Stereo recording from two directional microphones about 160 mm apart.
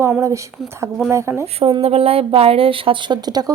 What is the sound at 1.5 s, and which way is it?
A woman's voice, 35° right (ahead or behind).